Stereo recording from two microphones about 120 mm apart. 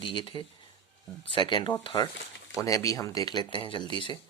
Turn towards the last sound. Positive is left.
turn(degrees=40)  # may be behind; listen again after turning